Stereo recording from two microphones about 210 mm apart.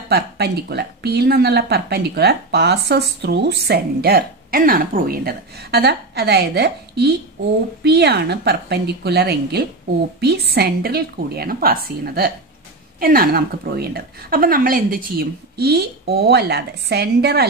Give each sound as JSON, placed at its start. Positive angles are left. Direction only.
{"t": 0.1, "sound": "speech", "side_deg": -50}